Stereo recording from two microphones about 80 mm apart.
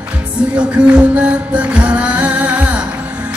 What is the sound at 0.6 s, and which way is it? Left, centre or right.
Music, centre.